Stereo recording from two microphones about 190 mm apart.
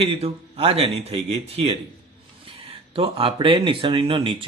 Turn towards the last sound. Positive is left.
turn(degrees=-30)  # may be behind; listen again after turning